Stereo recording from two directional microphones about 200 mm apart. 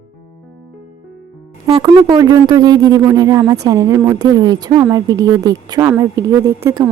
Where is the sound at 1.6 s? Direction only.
20° right (ahead or behind).